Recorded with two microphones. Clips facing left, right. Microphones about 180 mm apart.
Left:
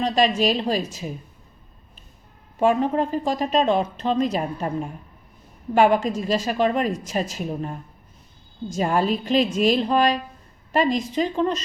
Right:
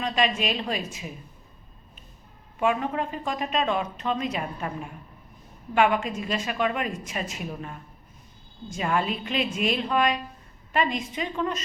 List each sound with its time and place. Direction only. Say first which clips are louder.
0.0 s speech: left 6 dB; 35° left (ahead or behind)
2.6 s speech: left 6 dB; 35° left (ahead or behind)